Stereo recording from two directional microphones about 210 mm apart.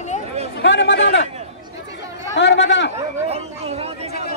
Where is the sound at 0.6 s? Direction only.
55° left (ahead or behind).